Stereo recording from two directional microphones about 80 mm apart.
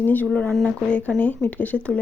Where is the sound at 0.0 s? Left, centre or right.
Left.